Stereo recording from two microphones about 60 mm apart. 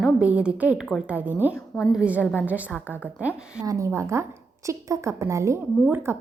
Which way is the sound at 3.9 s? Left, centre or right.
Right.